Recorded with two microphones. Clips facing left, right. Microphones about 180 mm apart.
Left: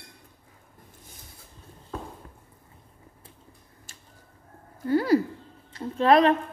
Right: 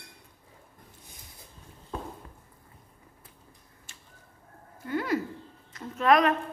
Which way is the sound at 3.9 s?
40° left (ahead or behind).